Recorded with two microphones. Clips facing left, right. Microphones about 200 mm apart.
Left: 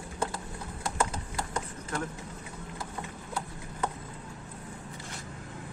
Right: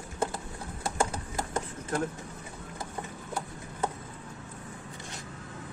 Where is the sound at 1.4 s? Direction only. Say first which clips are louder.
Right 3 dB; 25° right (ahead or behind).